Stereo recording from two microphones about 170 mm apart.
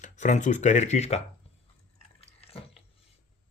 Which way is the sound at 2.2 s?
35° left (ahead or behind).